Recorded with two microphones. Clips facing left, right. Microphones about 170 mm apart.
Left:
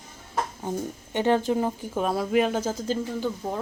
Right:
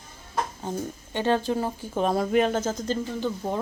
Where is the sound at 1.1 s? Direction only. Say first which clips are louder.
Left 2 dB; 15° left (ahead or behind).